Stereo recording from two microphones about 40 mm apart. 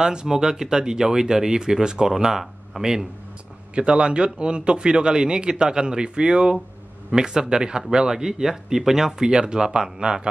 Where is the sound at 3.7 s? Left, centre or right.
Right.